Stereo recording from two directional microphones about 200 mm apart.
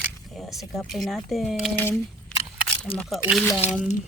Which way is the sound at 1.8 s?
10° left (ahead or behind).